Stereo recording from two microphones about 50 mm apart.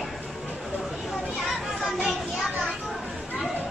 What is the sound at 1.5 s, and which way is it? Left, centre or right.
Children playing, centre.